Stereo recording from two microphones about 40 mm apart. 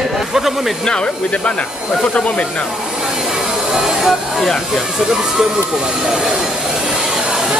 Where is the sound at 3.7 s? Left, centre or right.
Centre.